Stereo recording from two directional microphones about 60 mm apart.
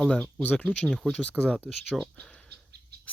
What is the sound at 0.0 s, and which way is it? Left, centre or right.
Speech, centre.